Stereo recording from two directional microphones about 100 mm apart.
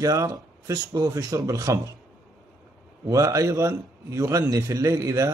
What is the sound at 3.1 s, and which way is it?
Speech, 30° right (ahead or behind).